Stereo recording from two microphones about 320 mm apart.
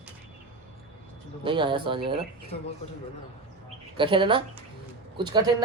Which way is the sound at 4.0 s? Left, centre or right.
Centre.